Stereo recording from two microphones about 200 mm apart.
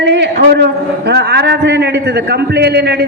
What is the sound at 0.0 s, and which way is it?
A man's voice, 60° right (ahead or behind).